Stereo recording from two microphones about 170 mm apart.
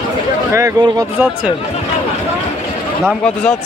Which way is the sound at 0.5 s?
15° right (ahead or behind).